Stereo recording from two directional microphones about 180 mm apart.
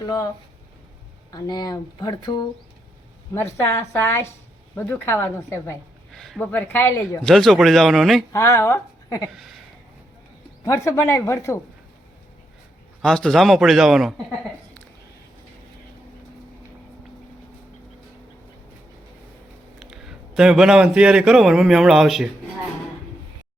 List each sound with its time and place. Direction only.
0.0 s speech: 20° left (ahead or behind)
1.3 s speech: 20° left (ahead or behind)
6.1 s a man's voice: centre (ahead or behind)
8.3 s speech: 15° left (ahead or behind)
9.3 s a man's voice: centre (ahead or behind)
10.6 s speech: 20° left (ahead or behind)
13.0 s a man's voice: 5° left (ahead or behind)
19.8 s a man's voice: centre (ahead or behind)